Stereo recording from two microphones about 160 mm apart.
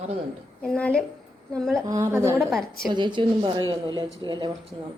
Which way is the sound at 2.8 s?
30° right (ahead or behind).